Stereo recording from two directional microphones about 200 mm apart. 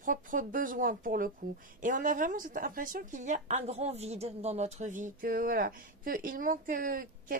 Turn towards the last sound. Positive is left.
turn(degrees=-45)  # may be behind; listen again after turning